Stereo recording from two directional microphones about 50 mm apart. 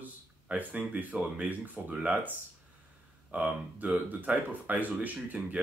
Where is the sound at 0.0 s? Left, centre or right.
Right.